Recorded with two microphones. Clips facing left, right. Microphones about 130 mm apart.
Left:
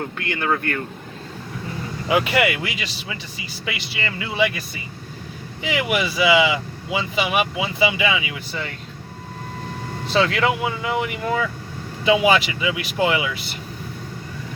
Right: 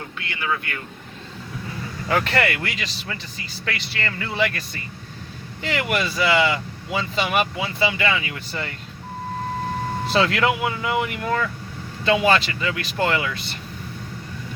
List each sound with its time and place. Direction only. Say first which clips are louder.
0.2 s speech: left 3 dB; 50° left (ahead or behind)
2.0 s speech: left 2 dB; 10° left (ahead or behind)
10.1 s speech: left 1 dB; centre (ahead or behind)